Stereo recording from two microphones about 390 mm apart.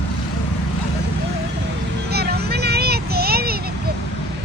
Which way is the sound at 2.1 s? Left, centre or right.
Right.